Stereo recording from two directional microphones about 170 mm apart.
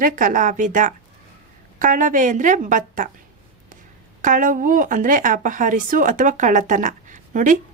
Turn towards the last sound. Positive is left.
turn(degrees=-50)  # may be behind; listen again after turning